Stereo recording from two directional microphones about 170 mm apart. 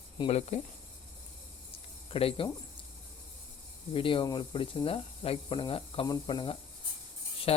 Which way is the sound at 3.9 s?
30° left (ahead or behind).